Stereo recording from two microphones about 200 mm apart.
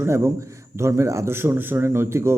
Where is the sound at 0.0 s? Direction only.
15° right (ahead or behind).